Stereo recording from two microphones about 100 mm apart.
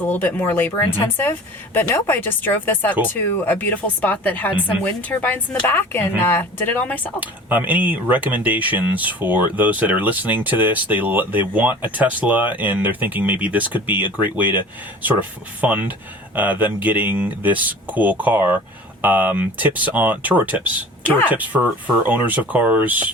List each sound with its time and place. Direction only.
0.0 s speech: 20° left (ahead or behind)
7.2 s speech: 15° right (ahead or behind)